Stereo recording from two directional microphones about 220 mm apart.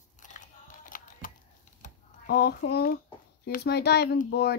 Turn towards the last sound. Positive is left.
turn(degrees=45)  # may be behind; listen again after turning